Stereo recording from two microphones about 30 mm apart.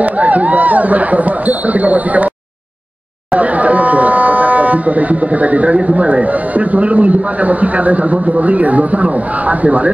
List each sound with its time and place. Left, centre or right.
0.0 s speech: right
3.3 s speech: right